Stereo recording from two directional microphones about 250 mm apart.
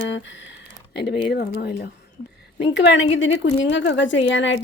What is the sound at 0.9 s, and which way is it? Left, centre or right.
A woman's voice, left.